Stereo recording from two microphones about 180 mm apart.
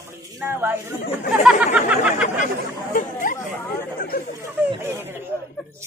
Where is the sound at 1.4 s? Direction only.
5° right (ahead or behind).